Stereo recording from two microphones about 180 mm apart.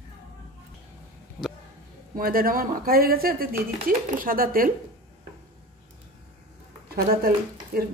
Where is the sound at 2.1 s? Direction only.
55° right (ahead or behind).